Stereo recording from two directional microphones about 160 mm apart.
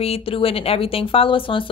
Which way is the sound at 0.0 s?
35° left (ahead or behind).